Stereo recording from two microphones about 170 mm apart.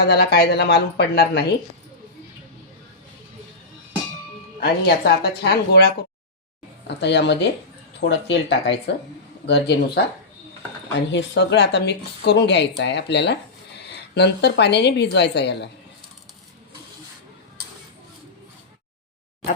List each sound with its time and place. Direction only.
0.0 s a woman's voice: 75° left (ahead or behind)
4.6 s a woman's voice: 65° left (ahead or behind)
6.8 s speech: 90° left
9.5 s a woman's voice: 75° left (ahead or behind)
11.1 s speech: 90° left